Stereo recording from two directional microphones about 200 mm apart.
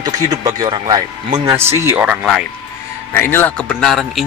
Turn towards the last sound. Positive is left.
turn(degrees=0)  # may be behind; listen again after turning